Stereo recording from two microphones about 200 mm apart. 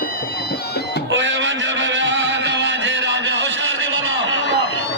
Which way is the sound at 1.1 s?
65° right (ahead or behind).